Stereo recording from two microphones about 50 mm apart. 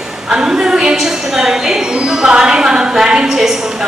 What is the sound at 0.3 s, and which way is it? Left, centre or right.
A woman's voice, centre.